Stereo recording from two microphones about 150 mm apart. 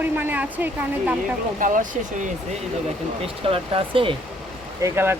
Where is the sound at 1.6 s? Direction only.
60° right (ahead or behind).